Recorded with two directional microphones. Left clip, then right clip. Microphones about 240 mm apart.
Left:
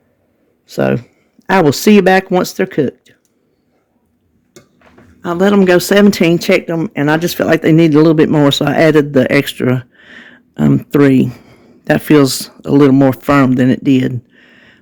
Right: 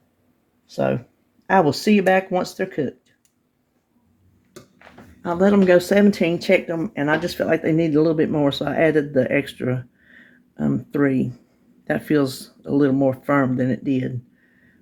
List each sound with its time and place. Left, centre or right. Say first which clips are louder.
0.7 s speech: left 7 dB; left
5.2 s speech: left 6 dB; left